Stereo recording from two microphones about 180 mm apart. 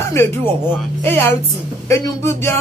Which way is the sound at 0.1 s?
15° left (ahead or behind).